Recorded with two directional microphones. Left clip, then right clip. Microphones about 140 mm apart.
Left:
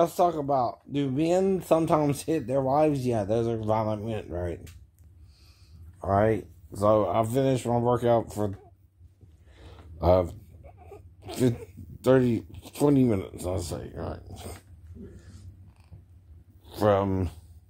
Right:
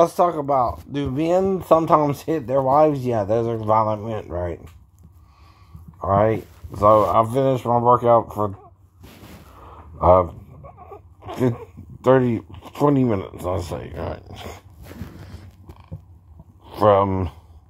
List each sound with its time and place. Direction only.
0.0 s speech: 20° right (ahead or behind)
5.9 s speech: 25° right (ahead or behind)
6.9 s speech: 15° right (ahead or behind)
9.9 s speech: 10° left (ahead or behind)
10.8 s speech: centre (ahead or behind)
16.6 s speech: 20° right (ahead or behind)